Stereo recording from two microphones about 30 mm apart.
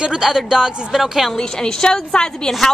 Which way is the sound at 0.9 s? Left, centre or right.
Centre.